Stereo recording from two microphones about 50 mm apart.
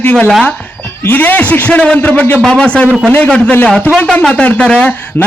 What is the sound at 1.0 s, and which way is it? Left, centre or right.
A man's voice, left.